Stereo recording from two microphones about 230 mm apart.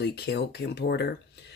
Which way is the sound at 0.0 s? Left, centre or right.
Left.